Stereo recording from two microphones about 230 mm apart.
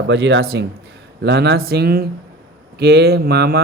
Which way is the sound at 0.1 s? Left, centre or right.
Right.